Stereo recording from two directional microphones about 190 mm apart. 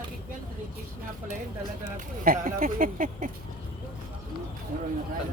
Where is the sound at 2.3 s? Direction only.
45° right (ahead or behind).